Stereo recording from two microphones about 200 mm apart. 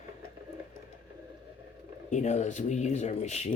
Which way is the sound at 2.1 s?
35° left (ahead or behind).